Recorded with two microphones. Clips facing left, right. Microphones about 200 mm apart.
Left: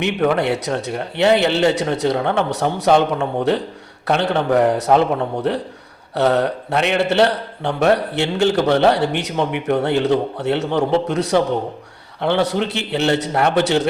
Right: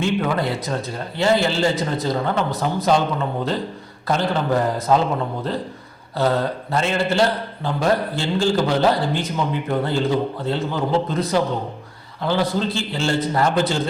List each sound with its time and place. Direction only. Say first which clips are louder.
0.0 s speech: left 3 dB; 70° left (ahead or behind)